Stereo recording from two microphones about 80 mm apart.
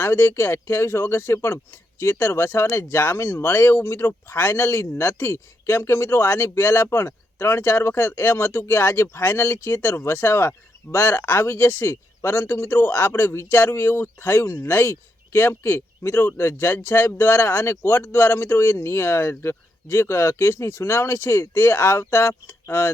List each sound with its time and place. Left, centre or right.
0.0 s speech: left